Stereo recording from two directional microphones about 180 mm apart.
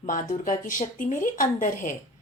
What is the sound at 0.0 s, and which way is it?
A woman's voice, 45° left (ahead or behind).